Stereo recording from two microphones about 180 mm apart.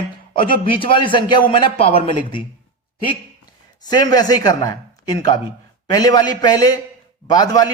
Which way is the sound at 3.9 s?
20° left (ahead or behind).